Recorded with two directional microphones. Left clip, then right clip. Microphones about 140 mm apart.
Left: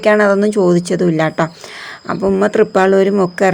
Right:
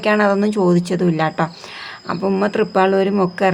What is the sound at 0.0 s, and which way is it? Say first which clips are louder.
A woman's voice: left 5 dB; 25° left (ahead or behind).